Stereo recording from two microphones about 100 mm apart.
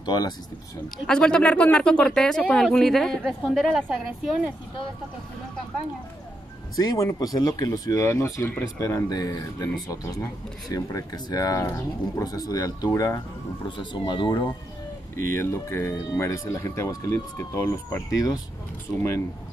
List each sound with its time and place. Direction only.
0.0 s speech: 40° left (ahead or behind)
0.9 s speech: 5° left (ahead or behind)
6.8 s speech: 35° left (ahead or behind)
13.7 s speech: 55° left (ahead or behind)
15.1 s speech: 30° left (ahead or behind)